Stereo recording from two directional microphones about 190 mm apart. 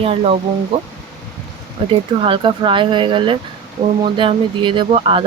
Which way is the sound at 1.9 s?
25° right (ahead or behind).